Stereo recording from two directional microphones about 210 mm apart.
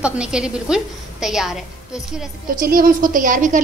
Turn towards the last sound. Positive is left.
turn(degrees=-40)  # may be behind; listen again after turning